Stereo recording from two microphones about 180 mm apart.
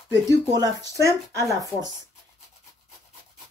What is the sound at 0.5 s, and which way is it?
Speech, 20° right (ahead or behind).